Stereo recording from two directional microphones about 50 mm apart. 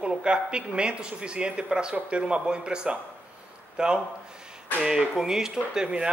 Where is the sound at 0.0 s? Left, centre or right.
Centre.